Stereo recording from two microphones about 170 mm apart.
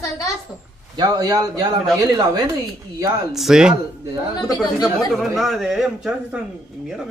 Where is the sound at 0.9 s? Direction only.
25° right (ahead or behind).